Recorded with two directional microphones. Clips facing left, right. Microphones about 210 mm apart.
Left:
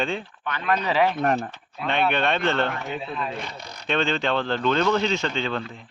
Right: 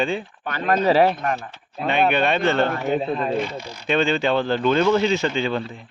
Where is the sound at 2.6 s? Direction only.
40° right (ahead or behind).